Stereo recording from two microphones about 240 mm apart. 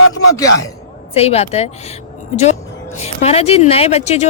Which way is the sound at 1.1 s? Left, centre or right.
Left.